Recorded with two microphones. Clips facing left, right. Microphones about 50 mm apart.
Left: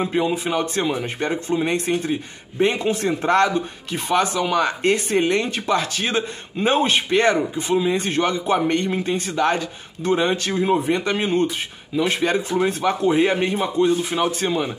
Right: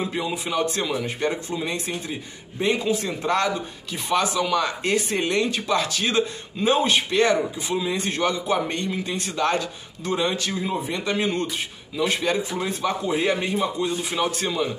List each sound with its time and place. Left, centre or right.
0.0 s speech: left
14.1 s speech: left